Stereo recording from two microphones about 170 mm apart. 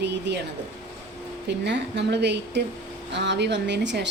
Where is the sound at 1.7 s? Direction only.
90° right.